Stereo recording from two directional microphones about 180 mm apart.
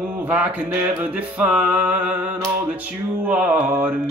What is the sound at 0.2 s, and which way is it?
Mantra, 10° right (ahead or behind).